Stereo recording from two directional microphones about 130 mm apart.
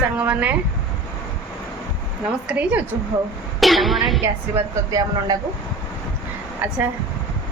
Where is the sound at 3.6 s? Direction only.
Centre (ahead or behind).